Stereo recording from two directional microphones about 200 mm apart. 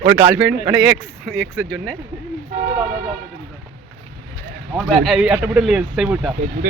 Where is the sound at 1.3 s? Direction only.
10° left (ahead or behind).